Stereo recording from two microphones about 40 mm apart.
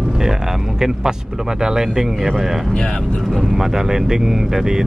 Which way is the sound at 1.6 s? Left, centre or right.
Centre.